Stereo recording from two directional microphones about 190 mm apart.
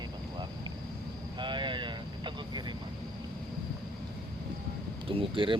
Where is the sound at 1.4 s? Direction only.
25° right (ahead or behind).